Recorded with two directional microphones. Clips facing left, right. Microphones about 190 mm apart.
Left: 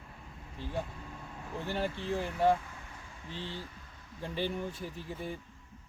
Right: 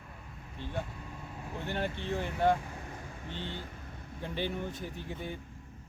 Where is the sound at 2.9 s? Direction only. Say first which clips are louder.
Right 5 dB; 40° right (ahead or behind).